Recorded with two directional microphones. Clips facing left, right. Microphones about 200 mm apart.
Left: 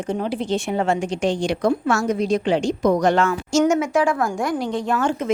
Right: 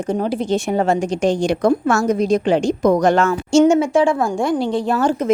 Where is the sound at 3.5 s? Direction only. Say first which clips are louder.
Right 7 dB; 30° right (ahead or behind).